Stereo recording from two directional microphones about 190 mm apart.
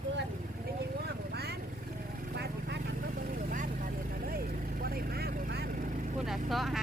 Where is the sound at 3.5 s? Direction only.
45° right (ahead or behind).